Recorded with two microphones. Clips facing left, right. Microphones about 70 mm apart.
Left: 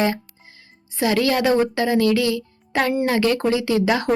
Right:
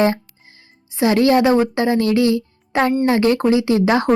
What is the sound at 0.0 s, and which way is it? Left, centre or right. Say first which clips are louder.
Speech: right 4 dB; right.